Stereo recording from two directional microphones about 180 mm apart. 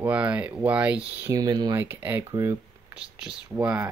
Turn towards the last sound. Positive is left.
turn(degrees=-10)  # may be behind; listen again after turning